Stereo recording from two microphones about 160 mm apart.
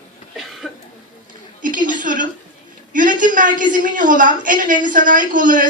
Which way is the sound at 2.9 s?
55° right (ahead or behind).